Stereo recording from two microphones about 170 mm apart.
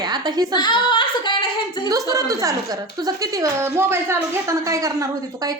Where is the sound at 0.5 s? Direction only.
25° left (ahead or behind).